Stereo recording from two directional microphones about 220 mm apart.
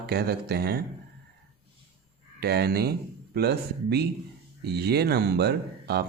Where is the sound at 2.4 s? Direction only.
45° right (ahead or behind).